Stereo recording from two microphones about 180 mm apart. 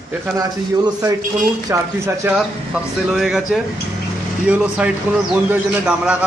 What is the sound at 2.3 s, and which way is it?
A man's voice, centre (ahead or behind).